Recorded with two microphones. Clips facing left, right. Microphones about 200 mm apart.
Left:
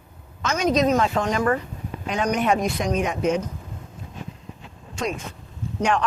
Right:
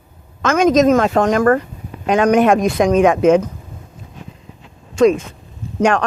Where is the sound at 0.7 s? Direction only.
50° right (ahead or behind).